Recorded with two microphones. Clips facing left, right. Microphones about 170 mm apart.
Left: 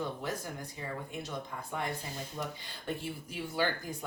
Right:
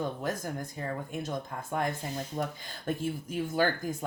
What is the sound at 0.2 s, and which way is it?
Speech, 45° right (ahead or behind).